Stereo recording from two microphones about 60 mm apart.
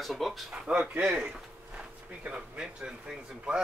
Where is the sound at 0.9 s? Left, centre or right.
Right.